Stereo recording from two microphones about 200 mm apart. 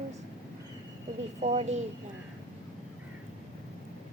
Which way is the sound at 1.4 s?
35° right (ahead or behind).